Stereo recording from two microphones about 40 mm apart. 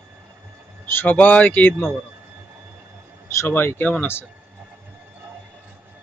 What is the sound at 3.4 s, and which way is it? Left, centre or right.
Speech, left.